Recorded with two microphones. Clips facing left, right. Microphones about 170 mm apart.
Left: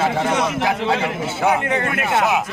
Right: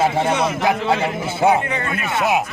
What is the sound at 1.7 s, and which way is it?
Speech, 65° left (ahead or behind).